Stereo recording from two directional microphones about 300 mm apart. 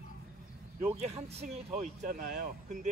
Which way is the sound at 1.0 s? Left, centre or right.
Right.